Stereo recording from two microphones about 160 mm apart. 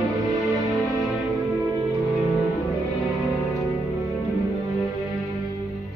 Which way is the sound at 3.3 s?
20° left (ahead or behind).